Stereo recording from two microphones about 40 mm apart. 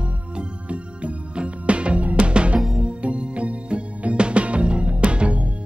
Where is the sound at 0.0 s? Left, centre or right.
Right.